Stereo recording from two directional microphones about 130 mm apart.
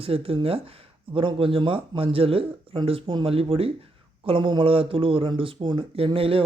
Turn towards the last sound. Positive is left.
turn(degrees=-45)  # may be behind; listen again after turning